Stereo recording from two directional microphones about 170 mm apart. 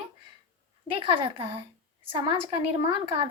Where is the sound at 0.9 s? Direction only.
30° right (ahead or behind).